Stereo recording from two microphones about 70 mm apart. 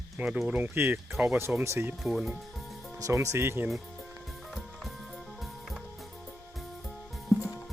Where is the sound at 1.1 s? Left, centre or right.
Centre.